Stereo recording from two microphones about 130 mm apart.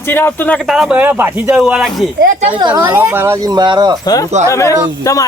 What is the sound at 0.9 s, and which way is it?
Speech, 15° right (ahead or behind).